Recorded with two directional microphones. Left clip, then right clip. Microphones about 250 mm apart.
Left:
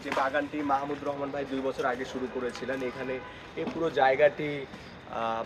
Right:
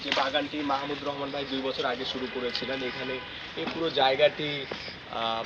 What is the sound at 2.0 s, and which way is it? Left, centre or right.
Speech, left.